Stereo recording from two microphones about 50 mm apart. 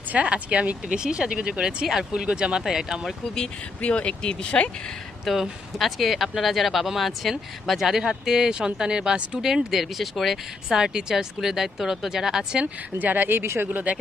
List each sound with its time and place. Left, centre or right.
0.1 s speech: right
2.6 s speech: centre
3.8 s speech: left
5.2 s speech: centre
10.7 s speech: centre
13.0 s speech: right
13.4 s speech: right